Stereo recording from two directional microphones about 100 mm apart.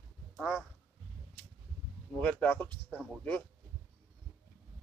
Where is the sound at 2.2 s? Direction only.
10° left (ahead or behind).